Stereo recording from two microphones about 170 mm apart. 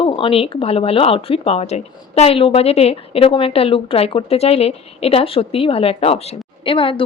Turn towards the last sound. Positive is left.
turn(degrees=30)  # may be behind; listen again after turning